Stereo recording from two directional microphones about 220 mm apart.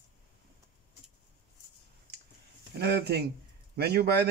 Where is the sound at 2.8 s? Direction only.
45° right (ahead or behind).